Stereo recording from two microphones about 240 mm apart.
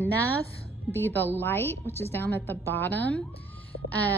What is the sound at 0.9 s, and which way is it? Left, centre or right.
A woman's voice, centre.